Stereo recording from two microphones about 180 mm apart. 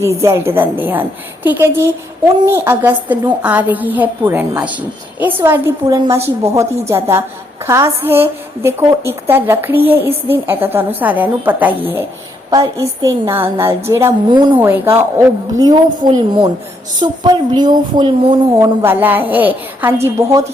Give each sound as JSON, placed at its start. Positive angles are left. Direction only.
{"t": 0.0, "sound": "a woman's voice", "side_deg": -15}
{"t": 14.3, "sound": "speech", "side_deg": -25}
{"t": 14.6, "sound": "a woman's voice", "side_deg": -15}
{"t": 18.6, "sound": "a woman's voice", "side_deg": -15}